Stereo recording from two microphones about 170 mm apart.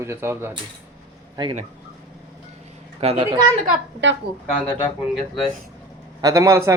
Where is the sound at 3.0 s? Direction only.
35° right (ahead or behind).